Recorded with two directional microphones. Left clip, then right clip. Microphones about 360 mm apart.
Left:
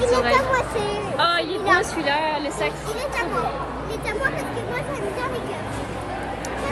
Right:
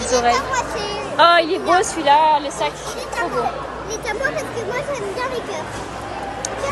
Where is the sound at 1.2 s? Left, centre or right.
Centre.